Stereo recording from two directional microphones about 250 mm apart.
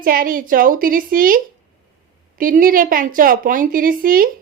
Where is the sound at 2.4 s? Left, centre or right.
Right.